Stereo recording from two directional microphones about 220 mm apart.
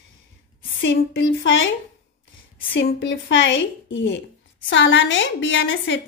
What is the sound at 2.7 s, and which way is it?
A woman's voice, 55° left (ahead or behind).